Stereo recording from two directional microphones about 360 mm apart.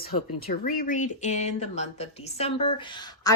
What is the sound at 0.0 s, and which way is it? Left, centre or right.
Speech, left.